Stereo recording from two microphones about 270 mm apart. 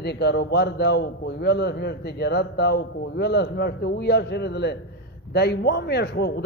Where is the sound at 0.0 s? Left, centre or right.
Left.